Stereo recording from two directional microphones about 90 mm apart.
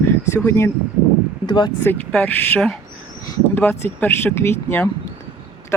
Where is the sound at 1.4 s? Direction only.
55° left (ahead or behind).